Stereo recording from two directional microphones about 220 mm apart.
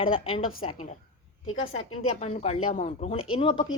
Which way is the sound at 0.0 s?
25° left (ahead or behind).